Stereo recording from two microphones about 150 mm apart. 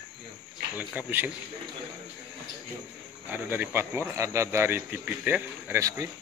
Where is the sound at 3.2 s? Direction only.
15° right (ahead or behind).